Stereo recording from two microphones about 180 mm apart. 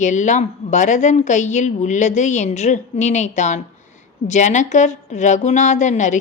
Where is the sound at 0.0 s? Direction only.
40° left (ahead or behind).